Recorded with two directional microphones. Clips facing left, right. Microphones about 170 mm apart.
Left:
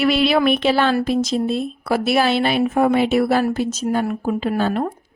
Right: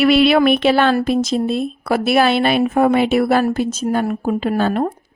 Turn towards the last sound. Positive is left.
turn(degrees=-55)  # may be behind; listen again after turning